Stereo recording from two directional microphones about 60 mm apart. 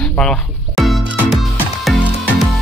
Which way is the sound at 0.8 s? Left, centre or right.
Centre.